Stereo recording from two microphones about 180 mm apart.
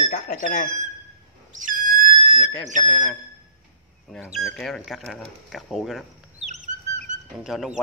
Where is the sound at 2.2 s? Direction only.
40° left (ahead or behind).